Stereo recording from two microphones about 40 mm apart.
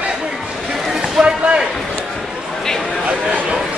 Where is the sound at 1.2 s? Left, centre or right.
Centre.